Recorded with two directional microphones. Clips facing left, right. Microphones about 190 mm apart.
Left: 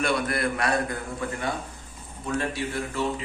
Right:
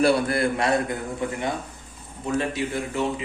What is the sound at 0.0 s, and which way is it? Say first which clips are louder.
A man's voice: right 5 dB; 30° right (ahead or behind).